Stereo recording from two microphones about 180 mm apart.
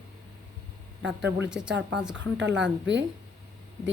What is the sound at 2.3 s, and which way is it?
Speech, 80° right.